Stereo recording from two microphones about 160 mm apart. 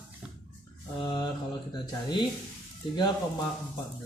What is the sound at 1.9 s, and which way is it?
A man's voice, 25° left (ahead or behind).